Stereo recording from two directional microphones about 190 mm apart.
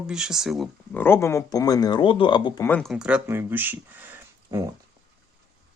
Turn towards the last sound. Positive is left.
turn(degrees=-15)  # may be behind; listen again after turning